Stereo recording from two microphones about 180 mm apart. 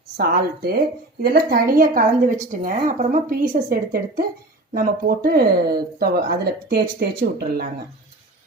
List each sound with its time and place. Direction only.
0.2 s speech: 55° right (ahead or behind)